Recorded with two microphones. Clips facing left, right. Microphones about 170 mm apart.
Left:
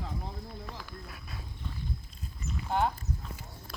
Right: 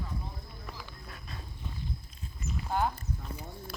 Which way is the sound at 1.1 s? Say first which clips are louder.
Even; 5° left (ahead or behind).